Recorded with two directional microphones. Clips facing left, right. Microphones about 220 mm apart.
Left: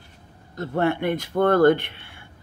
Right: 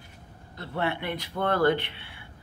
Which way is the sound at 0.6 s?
45° left (ahead or behind).